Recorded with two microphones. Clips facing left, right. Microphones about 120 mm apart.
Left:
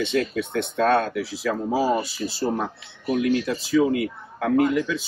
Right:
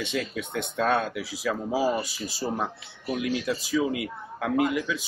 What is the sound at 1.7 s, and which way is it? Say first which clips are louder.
Speech: left 3 dB; 45° left (ahead or behind).